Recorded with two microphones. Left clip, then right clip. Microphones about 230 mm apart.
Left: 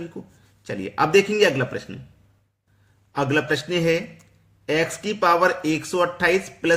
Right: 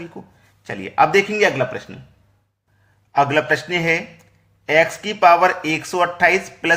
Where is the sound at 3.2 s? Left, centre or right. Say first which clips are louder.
Right 6 dB; centre.